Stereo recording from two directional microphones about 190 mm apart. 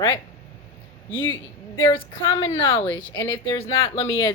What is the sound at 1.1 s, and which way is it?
Speech, 90° left.